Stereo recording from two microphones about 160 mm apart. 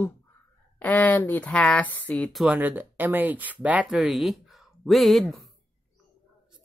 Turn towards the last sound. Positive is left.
turn(degrees=0)  # may be behind; listen again after turning